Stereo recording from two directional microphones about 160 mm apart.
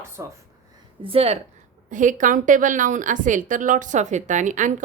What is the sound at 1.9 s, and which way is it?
A woman's voice, 50° right (ahead or behind).